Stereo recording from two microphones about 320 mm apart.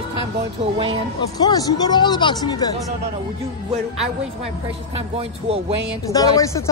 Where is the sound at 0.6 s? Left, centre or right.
Right.